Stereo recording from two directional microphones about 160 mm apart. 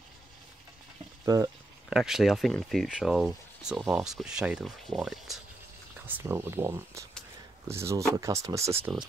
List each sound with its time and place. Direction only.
1.2 s speech: 20° right (ahead or behind)
1.9 s speech: 5° right (ahead or behind)
5.9 s speech: 10° right (ahead or behind)